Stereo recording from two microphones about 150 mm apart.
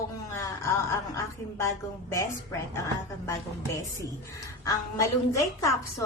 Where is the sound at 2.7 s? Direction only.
20° left (ahead or behind).